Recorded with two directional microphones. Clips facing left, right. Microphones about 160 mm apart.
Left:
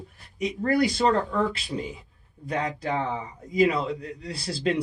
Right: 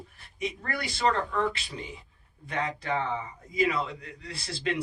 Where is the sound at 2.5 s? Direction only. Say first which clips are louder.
Left 3 dB; 35° left (ahead or behind).